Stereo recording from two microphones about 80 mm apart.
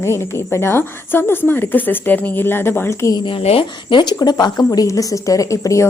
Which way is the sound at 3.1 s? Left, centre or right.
Left.